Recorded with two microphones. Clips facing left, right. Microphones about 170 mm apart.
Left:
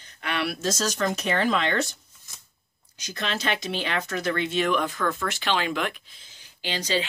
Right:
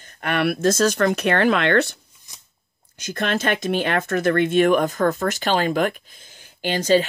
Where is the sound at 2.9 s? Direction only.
50° right (ahead or behind).